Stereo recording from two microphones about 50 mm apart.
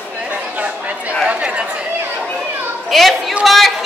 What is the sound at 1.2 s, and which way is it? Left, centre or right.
Chatter, right.